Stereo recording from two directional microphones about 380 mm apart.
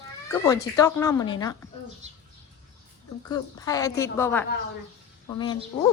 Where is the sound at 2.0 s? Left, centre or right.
Centre.